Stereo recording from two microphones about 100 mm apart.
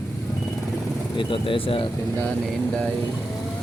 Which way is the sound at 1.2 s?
60° left (ahead or behind).